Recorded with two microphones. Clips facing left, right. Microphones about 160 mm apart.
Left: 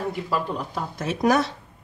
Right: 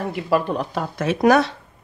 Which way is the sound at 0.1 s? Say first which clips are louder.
Right 6 dB; 70° right (ahead or behind).